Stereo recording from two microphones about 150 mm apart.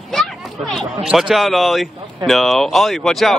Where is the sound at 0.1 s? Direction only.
Centre (ahead or behind).